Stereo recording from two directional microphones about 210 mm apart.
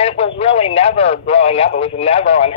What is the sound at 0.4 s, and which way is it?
Speech, 30° left (ahead or behind).